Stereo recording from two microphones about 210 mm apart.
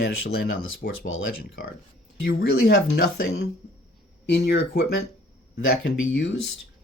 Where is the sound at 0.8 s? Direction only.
45° left (ahead or behind).